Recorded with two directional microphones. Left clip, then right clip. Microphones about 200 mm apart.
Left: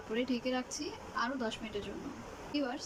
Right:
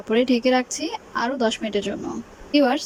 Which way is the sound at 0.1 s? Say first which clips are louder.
Right 16 dB; 35° right (ahead or behind).